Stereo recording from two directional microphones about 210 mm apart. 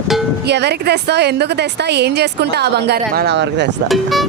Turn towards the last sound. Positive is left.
turn(degrees=0)  # may be behind; listen again after turning